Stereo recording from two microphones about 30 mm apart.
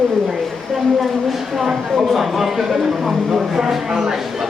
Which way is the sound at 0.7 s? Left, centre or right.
Centre.